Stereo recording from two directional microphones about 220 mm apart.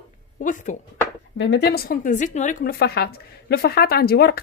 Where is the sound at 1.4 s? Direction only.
50° left (ahead or behind).